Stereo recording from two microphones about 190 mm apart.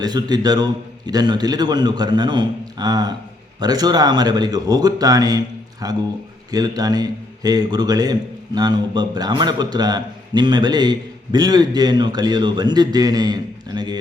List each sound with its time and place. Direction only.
0.0 s a man's voice: 20° right (ahead or behind)